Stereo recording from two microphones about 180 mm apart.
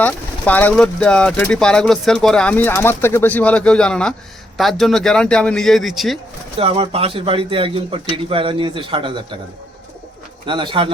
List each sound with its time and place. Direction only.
0.0 s speech: 10° left (ahead or behind)
6.6 s a man's voice: 35° right (ahead or behind)
10.4 s a man's voice: 25° right (ahead or behind)